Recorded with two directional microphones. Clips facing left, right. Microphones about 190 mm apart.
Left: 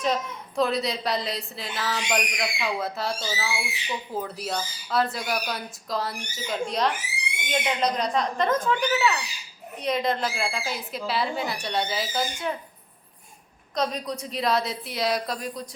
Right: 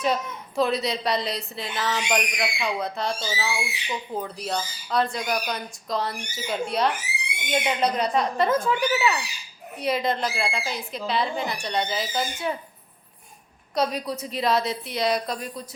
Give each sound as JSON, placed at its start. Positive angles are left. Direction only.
{"t": 0.0, "sound": "a woman's voice", "side_deg": -5}
{"t": 13.7, "sound": "a woman's voice", "side_deg": -5}